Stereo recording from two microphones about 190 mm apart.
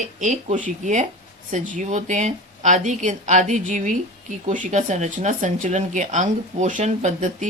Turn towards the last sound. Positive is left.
turn(degrees=-40)  # may be behind; listen again after turning